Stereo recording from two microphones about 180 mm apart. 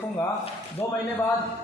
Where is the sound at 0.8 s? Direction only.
15° left (ahead or behind).